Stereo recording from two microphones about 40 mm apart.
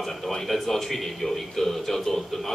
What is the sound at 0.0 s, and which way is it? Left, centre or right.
A man's voice, centre.